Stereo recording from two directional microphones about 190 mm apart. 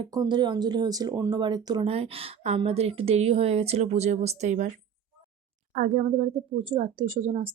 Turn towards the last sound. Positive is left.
turn(degrees=-30)  # may be behind; listen again after turning